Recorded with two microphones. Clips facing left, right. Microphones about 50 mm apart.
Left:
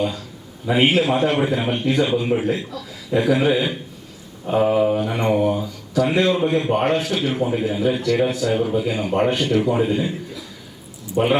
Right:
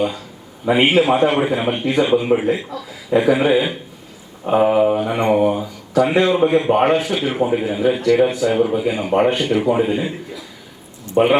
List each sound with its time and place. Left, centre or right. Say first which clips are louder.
0.7 s speech: right 3 dB; centre
11.2 s speech: right 5 dB; right